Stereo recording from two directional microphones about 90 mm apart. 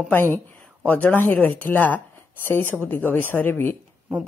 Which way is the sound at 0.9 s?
20° left (ahead or behind).